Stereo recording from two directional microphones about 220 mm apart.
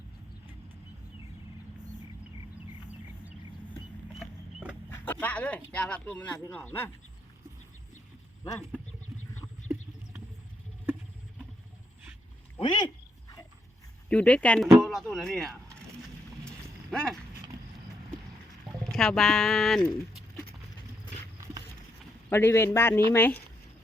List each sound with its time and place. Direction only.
4.2 s vehicle: 5° right (ahead or behind)
4.9 s a sound: 10° left (ahead or behind)
6.4 s a man's voice: 10° left (ahead or behind)
12.5 s speech: 20° left (ahead or behind)
14.1 s speech: 5° left (ahead or behind)
16.4 s a sound: 5° left (ahead or behind)
18.9 s speech: 5° left (ahead or behind)
22.3 s a man's voice: 10° left (ahead or behind)